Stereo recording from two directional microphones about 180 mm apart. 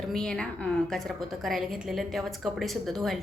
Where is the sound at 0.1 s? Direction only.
5° left (ahead or behind).